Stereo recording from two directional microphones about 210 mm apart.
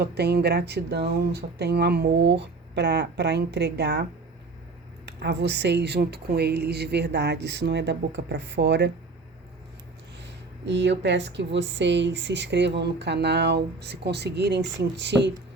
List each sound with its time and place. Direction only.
0.0 s speech: 50° right (ahead or behind)
5.0 s speech: 55° right (ahead or behind)
10.2 s speech: 55° right (ahead or behind)